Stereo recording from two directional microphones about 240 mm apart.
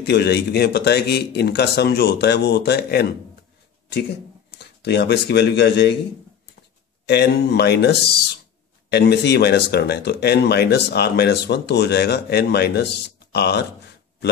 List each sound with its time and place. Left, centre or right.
0.0 s speech: left
4.6 s speech: left
7.1 s speech: left